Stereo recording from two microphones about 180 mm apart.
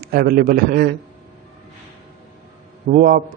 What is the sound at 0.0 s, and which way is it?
Speech, 55° right (ahead or behind).